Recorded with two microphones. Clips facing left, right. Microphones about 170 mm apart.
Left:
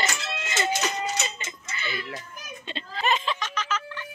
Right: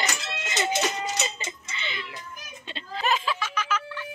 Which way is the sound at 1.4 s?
20° right (ahead or behind).